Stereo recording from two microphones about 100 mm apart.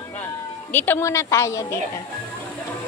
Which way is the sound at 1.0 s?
30° left (ahead or behind).